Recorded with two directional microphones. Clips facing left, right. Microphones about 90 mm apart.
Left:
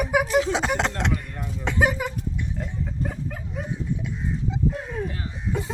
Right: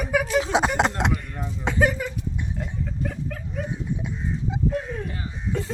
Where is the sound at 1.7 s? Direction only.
10° left (ahead or behind).